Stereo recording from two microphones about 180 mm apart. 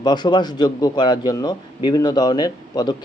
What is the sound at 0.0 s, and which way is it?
Speech, 25° left (ahead or behind).